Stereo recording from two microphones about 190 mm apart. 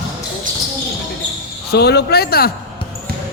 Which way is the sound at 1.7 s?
60° left (ahead or behind).